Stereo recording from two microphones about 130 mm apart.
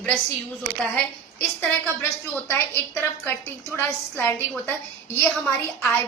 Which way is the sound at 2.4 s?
20° left (ahead or behind).